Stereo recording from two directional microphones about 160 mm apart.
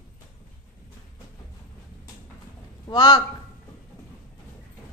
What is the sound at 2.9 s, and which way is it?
Speech, 25° left (ahead or behind).